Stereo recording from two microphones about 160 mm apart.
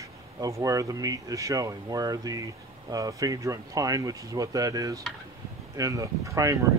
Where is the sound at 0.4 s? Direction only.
20° right (ahead or behind).